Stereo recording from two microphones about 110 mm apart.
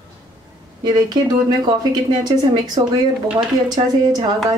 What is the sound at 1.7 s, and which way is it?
Speech, 40° right (ahead or behind).